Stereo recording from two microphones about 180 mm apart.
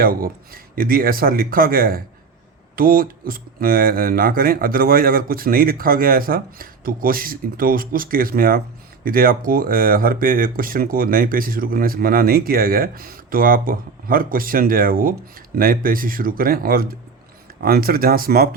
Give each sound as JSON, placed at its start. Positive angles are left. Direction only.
{"t": 0.0, "sound": "speech", "side_deg": -55}